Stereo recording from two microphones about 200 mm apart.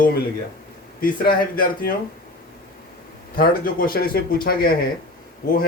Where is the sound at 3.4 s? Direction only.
45° left (ahead or behind).